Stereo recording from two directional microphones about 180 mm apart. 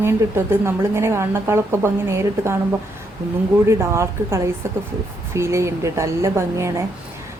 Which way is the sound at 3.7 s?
15° right (ahead or behind).